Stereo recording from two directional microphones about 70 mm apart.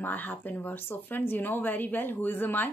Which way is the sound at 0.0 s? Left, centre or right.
Left.